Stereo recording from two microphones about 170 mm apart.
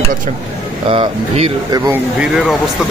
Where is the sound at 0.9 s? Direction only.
35° right (ahead or behind).